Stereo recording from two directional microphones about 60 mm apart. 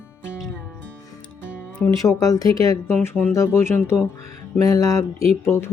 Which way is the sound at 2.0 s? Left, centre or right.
Left.